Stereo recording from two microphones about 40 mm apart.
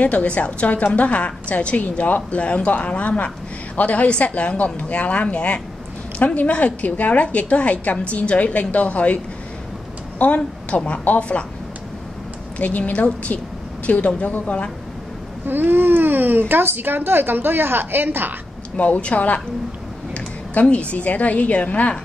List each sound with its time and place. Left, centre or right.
0.0 s a woman's voice: left
12.5 s a woman's voice: left
14.4 s a woman's voice: left
15.4 s speech: right
18.8 s a woman's voice: left
20.7 s a woman's voice: left